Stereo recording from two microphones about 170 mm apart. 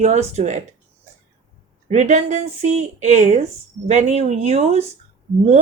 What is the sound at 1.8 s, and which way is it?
Speech, 45° right (ahead or behind).